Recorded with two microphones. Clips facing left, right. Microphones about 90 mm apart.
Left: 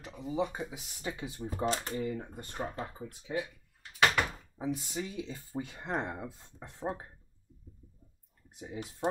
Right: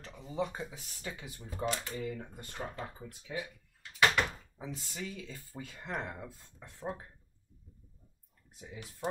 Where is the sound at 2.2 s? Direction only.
20° left (ahead or behind).